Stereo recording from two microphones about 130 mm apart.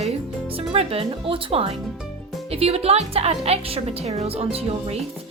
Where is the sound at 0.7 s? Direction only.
50° right (ahead or behind).